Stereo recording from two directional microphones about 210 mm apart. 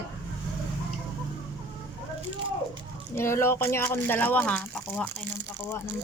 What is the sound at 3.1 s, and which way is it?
Speech, 10° left (ahead or behind).